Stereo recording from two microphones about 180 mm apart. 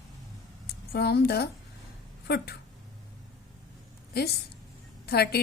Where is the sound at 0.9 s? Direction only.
65° left (ahead or behind).